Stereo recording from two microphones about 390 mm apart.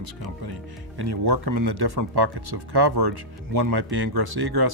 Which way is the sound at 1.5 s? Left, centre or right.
Right.